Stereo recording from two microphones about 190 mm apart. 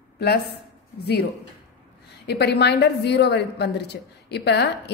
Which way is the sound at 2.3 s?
60° left (ahead or behind).